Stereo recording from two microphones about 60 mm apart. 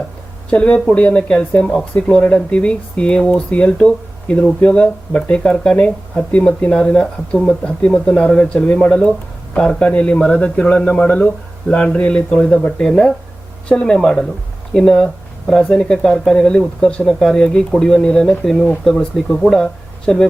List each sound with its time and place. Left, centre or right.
0.5 s speech: centre
17.1 s speech: centre